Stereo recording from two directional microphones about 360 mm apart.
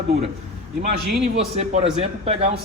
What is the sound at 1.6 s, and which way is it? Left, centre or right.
A man's voice, centre.